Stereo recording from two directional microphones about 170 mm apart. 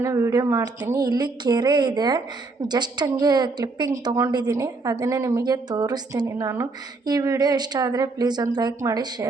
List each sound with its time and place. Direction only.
0.0 s speech: 20° right (ahead or behind)